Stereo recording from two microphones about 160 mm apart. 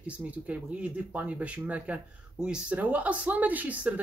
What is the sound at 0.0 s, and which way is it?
Speech, 10° right (ahead or behind).